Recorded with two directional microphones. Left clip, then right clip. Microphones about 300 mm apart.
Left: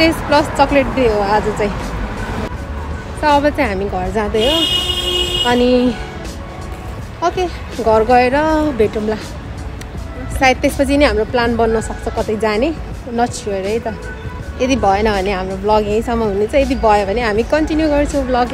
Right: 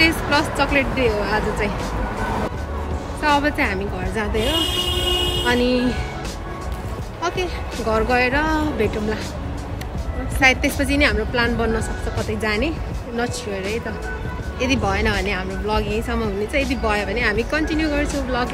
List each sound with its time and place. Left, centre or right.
0.0 s a woman's voice: centre
3.2 s a woman's voice: centre
7.2 s a woman's voice: centre
10.4 s a woman's voice: centre